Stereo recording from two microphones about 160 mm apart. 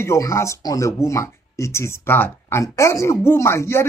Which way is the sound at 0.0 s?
15° left (ahead or behind).